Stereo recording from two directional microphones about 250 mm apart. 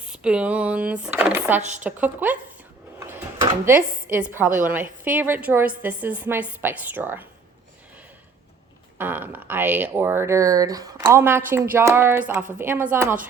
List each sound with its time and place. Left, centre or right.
0.1 s speech: centre
3.0 s a sound: centre
4.0 s a woman's voice: centre
9.0 s speech: centre